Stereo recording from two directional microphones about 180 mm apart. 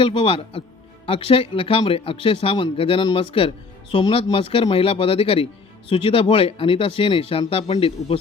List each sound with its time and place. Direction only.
0.0 s a man's voice: 30° left (ahead or behind)